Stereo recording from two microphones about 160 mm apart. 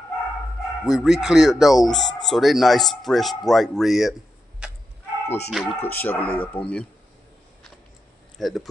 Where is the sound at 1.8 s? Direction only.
25° left (ahead or behind).